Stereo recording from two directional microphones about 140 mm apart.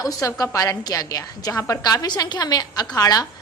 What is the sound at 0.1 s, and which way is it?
A woman's voice, 25° left (ahead or behind).